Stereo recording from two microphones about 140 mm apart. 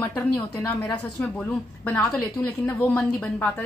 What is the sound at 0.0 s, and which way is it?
A woman's voice, 15° left (ahead or behind).